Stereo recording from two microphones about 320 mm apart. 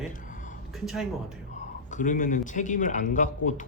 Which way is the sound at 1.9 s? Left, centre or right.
Left.